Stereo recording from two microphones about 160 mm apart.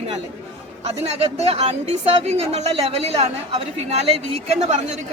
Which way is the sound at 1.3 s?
40° right (ahead or behind).